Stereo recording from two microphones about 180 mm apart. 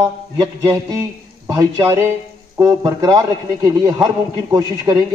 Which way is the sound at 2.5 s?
20° right (ahead or behind).